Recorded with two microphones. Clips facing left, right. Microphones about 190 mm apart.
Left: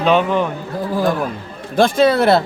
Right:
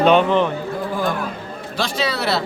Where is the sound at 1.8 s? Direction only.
50° left (ahead or behind).